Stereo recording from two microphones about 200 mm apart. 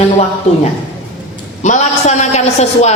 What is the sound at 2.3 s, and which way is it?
Speech, 35° left (ahead or behind).